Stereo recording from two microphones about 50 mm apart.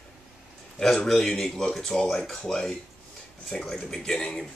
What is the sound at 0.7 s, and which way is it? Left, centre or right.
Speech, centre.